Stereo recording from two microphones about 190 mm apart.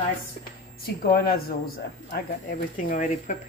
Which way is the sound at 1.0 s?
50° left (ahead or behind).